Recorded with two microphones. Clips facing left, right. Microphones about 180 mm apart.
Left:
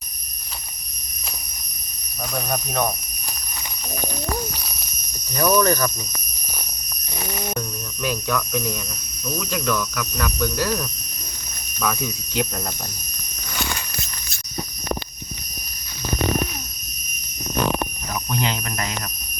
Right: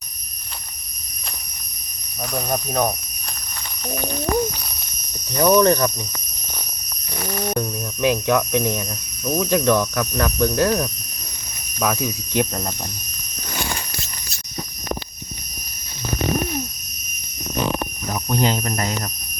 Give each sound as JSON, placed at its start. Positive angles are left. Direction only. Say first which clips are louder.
{"t": 5.4, "sound": "speech", "louder": "right 4 dB", "side_deg": -25}
{"t": 7.2, "sound": "a sound", "louder": "right 3 dB", "side_deg": 10}
{"t": 8.1, "sound": "speech", "louder": "right 3 dB", "side_deg": -20}
{"t": 18.1, "sound": "speech", "louder": "right 6 dB", "side_deg": -40}